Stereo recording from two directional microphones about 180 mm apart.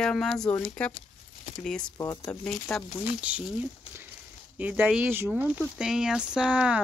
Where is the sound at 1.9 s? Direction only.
15° left (ahead or behind).